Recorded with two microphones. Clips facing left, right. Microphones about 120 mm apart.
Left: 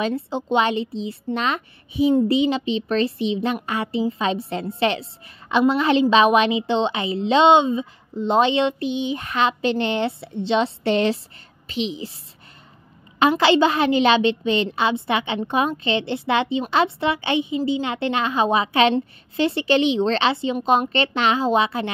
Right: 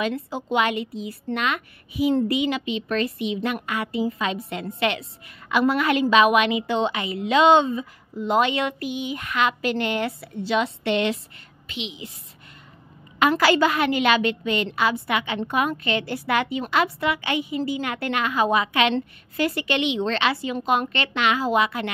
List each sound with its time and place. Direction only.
0.0 s a woman's voice: 25° left (ahead or behind)
13.2 s a woman's voice: 25° left (ahead or behind)